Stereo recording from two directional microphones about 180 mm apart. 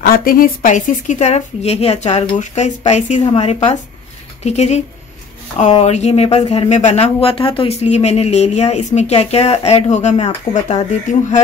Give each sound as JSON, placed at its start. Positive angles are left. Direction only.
{"t": 0.0, "sound": "speech", "side_deg": 50}